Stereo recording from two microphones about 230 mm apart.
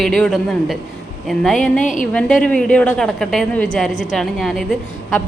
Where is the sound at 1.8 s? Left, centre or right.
Left.